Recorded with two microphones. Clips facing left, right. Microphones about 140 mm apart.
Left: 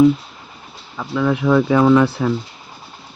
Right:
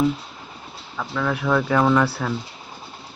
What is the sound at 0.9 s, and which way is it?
Speech, 10° left (ahead or behind).